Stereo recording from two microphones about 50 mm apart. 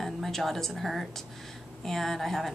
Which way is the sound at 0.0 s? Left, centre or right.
Centre.